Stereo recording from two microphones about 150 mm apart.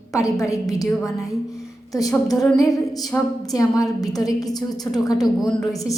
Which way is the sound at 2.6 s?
25° left (ahead or behind).